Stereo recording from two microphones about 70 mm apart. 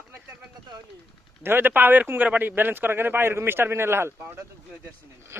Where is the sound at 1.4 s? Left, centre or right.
Right.